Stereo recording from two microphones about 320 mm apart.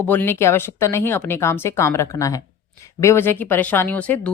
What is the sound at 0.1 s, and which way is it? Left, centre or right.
A woman's voice, centre.